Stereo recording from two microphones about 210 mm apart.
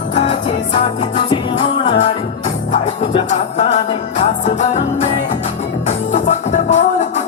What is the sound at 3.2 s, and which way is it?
Music, 35° left (ahead or behind).